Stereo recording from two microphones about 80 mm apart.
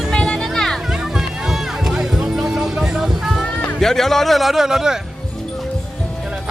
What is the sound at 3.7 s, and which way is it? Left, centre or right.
A man's voice, centre.